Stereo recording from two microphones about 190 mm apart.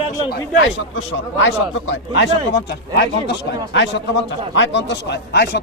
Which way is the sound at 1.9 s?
65° left (ahead or behind).